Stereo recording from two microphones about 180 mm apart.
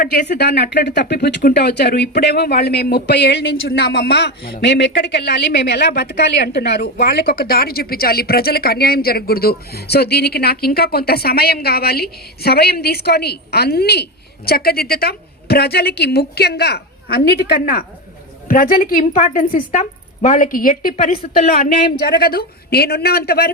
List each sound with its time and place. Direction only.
0.0 s a woman's voice: 60° left (ahead or behind)
22.0 s speech: 60° left (ahead or behind)